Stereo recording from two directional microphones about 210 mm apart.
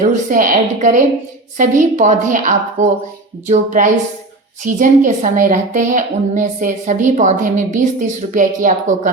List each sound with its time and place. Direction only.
0.0 s a woman's voice: 40° right (ahead or behind)